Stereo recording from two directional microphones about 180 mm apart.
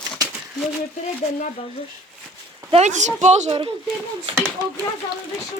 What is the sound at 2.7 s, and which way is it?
Speech, 40° right (ahead or behind).